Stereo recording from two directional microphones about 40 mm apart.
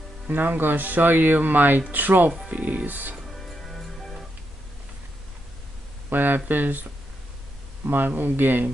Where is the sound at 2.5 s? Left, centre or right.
Right.